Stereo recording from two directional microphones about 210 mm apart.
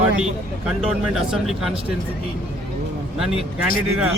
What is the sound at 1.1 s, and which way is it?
Speech, centre (ahead or behind).